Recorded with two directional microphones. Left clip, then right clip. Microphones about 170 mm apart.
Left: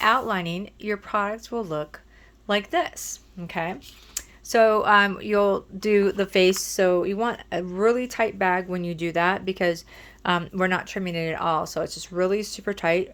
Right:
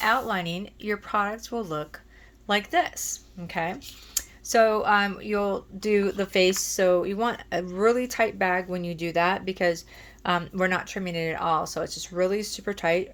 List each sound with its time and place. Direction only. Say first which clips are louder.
0.0 s speech: left 3 dB; 40° left (ahead or behind); by 4.3 s 15° left (ahead or behind)
4.4 s speech: left 2 dB; 35° left (ahead or behind)